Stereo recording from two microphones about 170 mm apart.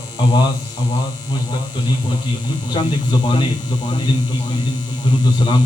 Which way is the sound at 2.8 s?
30° left (ahead or behind).